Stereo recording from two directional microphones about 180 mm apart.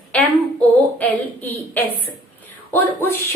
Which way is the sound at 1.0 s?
10° left (ahead or behind).